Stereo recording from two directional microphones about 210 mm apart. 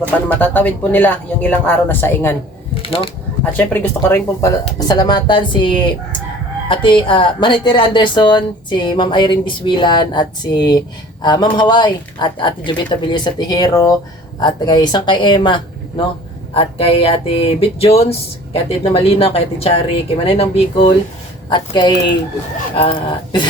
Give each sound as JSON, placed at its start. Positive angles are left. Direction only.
{"t": 0.3, "sound": "speech", "side_deg": 5}
{"t": 2.8, "sound": "speech", "side_deg": 25}
{"t": 3.6, "sound": "a woman's voice", "side_deg": 10}